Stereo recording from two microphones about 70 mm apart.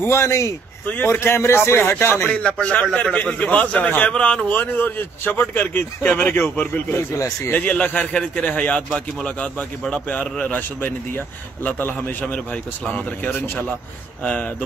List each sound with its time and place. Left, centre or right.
0.0 s speech: left
2.2 s a man's voice: centre
4.6 s a man's voice: left
7.2 s speech: left
7.5 s a man's voice: left
10.5 s a man's voice: left